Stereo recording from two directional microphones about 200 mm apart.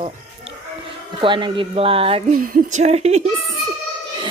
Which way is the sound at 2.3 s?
45° right (ahead or behind).